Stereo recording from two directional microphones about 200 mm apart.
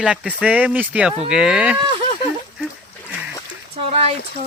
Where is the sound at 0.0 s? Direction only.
5° right (ahead or behind).